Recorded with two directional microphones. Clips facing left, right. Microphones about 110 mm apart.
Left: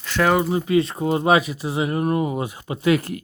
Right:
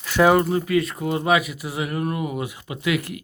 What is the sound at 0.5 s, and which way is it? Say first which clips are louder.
Speech: left 2 dB; 25° left (ahead or behind).